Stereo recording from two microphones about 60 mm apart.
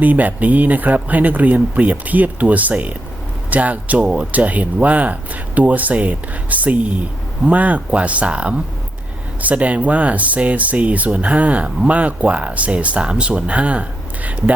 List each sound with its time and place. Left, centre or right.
0.0 s speech: right